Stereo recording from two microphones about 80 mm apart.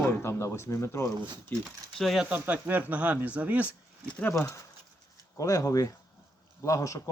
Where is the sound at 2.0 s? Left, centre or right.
Centre.